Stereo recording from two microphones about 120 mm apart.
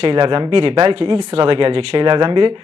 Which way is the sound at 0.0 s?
50° right (ahead or behind).